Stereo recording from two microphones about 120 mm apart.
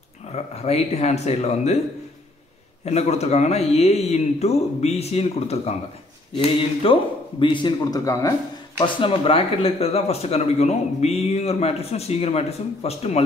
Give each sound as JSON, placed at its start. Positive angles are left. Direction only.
{"t": 0.3, "sound": "speech", "side_deg": 60}
{"t": 2.8, "sound": "speech", "side_deg": 65}
{"t": 6.3, "sound": "speech", "side_deg": 45}
{"t": 8.7, "sound": "speech", "side_deg": 45}